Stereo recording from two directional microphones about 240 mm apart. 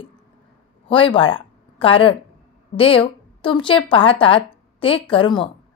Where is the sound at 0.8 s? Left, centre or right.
Left.